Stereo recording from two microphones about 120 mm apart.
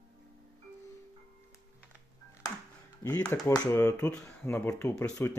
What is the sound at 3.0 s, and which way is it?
Speech, 20° left (ahead or behind).